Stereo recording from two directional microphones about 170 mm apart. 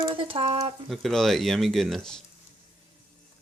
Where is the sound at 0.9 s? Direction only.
Centre (ahead or behind).